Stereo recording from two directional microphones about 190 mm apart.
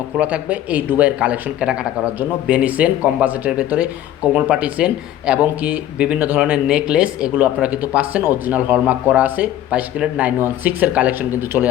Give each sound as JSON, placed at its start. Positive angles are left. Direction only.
{"t": 0.2, "sound": "speech", "side_deg": -5}